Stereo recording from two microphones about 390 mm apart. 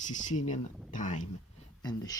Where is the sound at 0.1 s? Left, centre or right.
Centre.